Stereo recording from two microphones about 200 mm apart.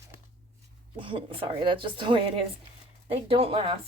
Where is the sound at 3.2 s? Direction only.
30° right (ahead or behind).